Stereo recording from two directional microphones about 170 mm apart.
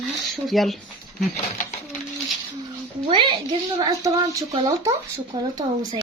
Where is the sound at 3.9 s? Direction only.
20° right (ahead or behind).